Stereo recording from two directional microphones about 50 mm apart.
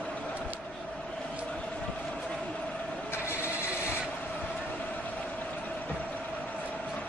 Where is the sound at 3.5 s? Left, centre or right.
Right.